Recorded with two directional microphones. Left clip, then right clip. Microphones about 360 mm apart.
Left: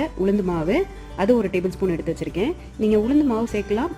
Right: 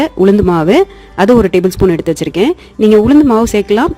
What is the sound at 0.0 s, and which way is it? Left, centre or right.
Speech, right.